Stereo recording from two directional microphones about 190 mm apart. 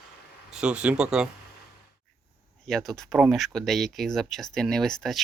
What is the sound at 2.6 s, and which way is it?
Speech, centre (ahead or behind).